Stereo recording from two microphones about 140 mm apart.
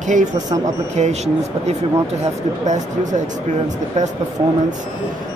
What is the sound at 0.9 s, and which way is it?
Speech, 55° right (ahead or behind).